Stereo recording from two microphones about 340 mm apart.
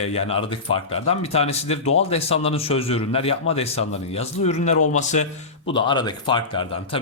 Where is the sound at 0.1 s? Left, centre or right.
Centre.